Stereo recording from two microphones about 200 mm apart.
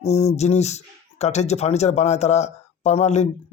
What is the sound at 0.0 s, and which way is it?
Speech, 35° left (ahead or behind).